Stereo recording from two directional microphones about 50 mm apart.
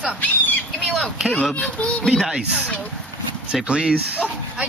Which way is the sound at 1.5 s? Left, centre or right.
Left.